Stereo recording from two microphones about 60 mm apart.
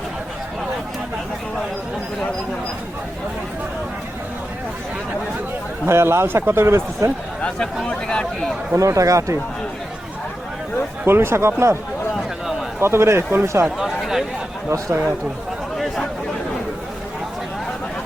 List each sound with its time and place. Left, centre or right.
5.8 s a man's voice: right
7.9 s speech: centre
8.8 s speech: right
11.0 s a man's voice: right
12.8 s a man's voice: right
13.7 s speech: centre
14.7 s a man's voice: right